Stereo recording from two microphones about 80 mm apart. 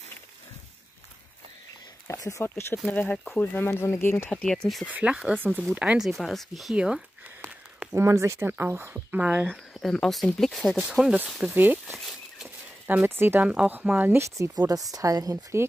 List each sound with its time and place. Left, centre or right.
2.0 s a sound: left
2.4 s speech: left
2.9 s speech: centre
4.3 s speech: centre
4.8 s speech: centre
6.0 s speech: centre
6.7 s speech: centre
7.9 s speech: right; by 9.5 s centre
9.5 s speech: centre
10.8 s speech: centre
11.5 s speech: right
12.4 s a sound: right
13.5 s speech: centre
14.2 s a woman's voice: right